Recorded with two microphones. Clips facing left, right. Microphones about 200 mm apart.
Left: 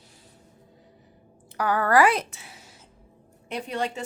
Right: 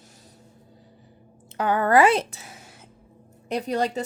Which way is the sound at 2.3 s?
40° right (ahead or behind).